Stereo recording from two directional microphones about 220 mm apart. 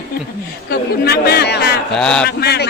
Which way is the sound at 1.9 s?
5° left (ahead or behind).